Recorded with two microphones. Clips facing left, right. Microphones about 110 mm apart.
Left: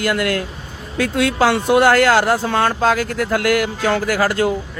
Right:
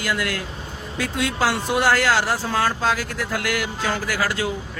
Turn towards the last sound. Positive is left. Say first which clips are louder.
# left 7 dB
turn(degrees=45)  # may be behind; listen again after turning